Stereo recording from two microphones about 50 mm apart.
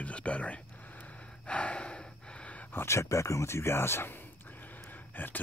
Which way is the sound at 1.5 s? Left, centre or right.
Left.